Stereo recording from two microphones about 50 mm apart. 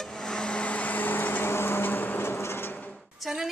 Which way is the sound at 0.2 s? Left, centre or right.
Centre.